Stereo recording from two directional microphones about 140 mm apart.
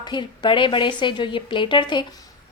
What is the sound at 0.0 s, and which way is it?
A woman's voice, 35° left (ahead or behind).